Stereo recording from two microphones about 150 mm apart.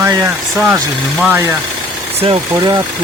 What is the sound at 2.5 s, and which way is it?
Speech, 25° right (ahead or behind).